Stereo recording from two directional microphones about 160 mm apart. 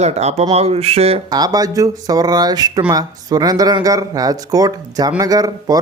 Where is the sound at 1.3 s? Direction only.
25° right (ahead or behind).